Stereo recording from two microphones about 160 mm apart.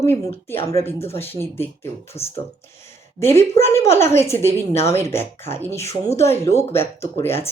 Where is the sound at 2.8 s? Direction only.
15° left (ahead or behind).